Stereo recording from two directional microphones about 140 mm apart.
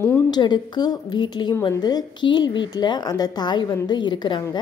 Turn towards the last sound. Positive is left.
turn(degrees=35)  # may be behind; listen again after turning